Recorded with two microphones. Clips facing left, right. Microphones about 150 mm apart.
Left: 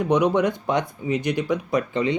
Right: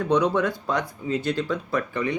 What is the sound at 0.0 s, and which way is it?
Speech, 15° left (ahead or behind).